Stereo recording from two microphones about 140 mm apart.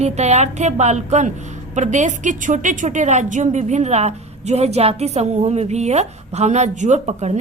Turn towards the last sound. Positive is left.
turn(degrees=-55)  # may be behind; listen again after turning